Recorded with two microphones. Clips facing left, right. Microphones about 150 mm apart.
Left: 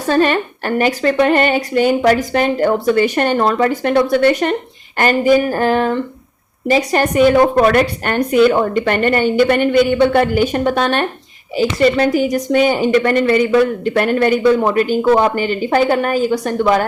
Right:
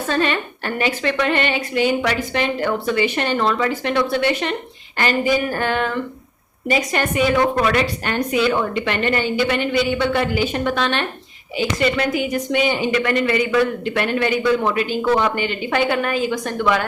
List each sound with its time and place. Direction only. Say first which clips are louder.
0.0 s a woman's voice: left 6 dB; 40° left (ahead or behind)